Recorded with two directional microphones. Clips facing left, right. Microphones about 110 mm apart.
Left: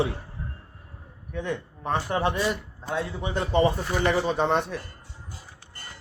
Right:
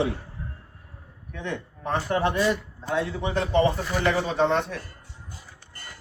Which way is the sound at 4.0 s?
15° left (ahead or behind).